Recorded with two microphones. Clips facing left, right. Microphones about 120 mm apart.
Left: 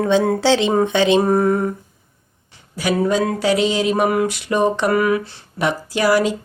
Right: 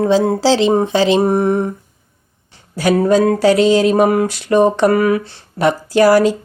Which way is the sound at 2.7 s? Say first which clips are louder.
Right 5 dB; 35° right (ahead or behind).